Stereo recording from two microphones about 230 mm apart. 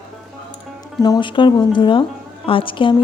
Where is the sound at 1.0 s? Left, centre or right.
Centre.